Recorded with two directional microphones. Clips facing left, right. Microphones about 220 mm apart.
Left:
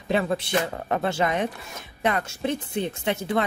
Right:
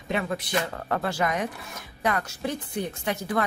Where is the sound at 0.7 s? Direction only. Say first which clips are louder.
Left 3 dB; 20° left (ahead or behind).